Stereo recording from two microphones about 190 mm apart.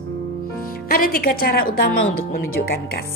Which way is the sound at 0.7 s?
50° left (ahead or behind).